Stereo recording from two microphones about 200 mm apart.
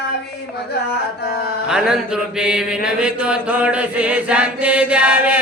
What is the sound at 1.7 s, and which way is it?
Mantra, 5° right (ahead or behind).